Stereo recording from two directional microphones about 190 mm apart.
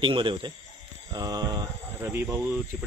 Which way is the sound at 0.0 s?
25° right (ahead or behind).